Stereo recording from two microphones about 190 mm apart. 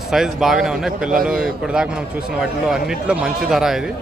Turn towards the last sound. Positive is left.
turn(degrees=0)  # may be behind; listen again after turning